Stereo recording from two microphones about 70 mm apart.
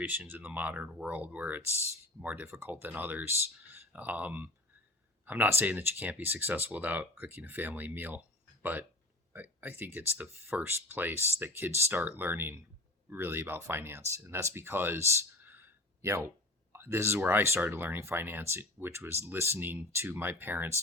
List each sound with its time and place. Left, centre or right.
0.3 s speech: right